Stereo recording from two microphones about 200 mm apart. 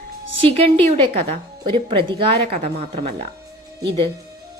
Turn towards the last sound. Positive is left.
turn(degrees=-30)  # may be behind; listen again after turning